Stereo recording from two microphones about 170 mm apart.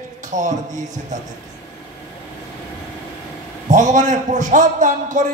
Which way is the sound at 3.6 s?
45° right (ahead or behind).